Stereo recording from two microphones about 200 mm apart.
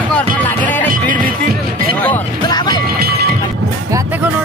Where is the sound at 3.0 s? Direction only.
50° right (ahead or behind).